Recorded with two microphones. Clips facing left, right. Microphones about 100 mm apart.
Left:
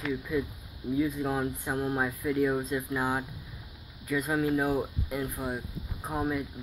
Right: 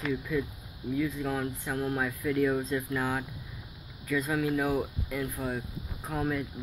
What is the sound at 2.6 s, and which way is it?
Speech, 10° left (ahead or behind).